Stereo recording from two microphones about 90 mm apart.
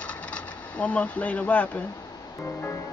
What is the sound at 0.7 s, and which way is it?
Speech, 15° left (ahead or behind).